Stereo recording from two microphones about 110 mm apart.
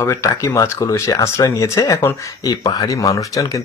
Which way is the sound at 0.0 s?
25° left (ahead or behind).